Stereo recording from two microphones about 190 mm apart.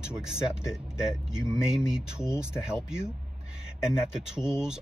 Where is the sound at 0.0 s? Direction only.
5° right (ahead or behind).